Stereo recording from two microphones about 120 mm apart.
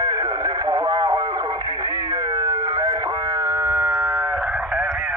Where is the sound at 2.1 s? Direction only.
30° right (ahead or behind).